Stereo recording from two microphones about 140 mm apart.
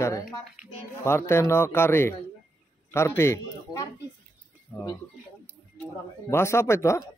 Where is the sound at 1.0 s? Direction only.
20° left (ahead or behind).